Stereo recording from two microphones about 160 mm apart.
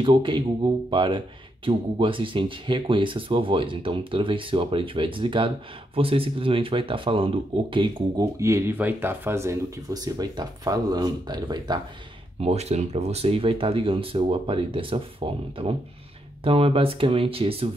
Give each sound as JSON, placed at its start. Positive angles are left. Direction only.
{"t": 0.0, "sound": "speech", "side_deg": -30}
{"t": 8.4, "sound": "speech", "side_deg": -20}
{"t": 12.4, "sound": "speech", "side_deg": -40}